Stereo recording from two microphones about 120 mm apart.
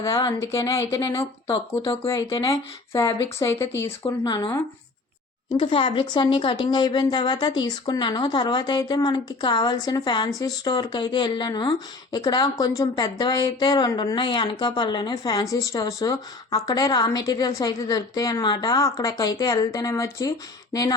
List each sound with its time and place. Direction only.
0.0 s speech: 30° left (ahead or behind)
2.0 s speech: 25° left (ahead or behind)
4.2 s speech: 35° left (ahead or behind)